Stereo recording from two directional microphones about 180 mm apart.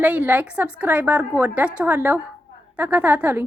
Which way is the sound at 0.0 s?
10° right (ahead or behind).